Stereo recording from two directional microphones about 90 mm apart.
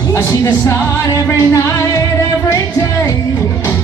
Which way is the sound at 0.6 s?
35° left (ahead or behind).